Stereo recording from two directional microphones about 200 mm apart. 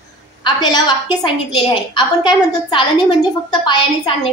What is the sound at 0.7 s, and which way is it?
A woman's voice, 20° left (ahead or behind).